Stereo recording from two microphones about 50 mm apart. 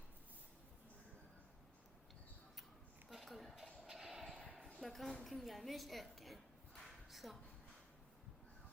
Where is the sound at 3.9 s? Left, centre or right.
Centre.